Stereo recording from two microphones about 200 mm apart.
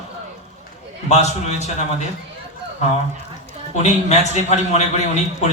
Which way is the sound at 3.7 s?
35° left (ahead or behind).